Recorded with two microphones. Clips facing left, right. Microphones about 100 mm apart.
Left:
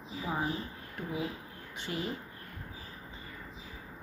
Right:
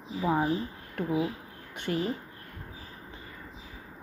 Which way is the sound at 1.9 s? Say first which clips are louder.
Right 7 dB; 50° right (ahead or behind).